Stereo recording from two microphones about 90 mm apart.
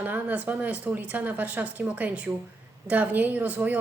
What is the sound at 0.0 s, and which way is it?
Speech, 20° right (ahead or behind).